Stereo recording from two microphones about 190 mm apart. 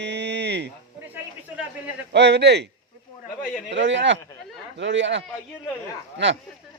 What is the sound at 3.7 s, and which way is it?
Speech, 65° right (ahead or behind).